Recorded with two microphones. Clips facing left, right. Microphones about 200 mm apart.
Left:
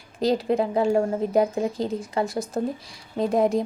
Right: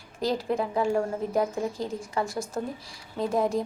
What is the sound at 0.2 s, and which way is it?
A woman's voice, 20° left (ahead or behind).